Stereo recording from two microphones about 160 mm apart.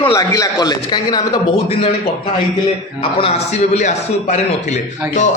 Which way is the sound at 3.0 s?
40° left (ahead or behind).